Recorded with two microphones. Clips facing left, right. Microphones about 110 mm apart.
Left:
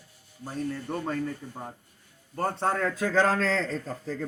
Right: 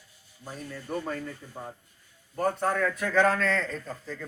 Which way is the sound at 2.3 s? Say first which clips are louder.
Right 1 dB; 30° left (ahead or behind).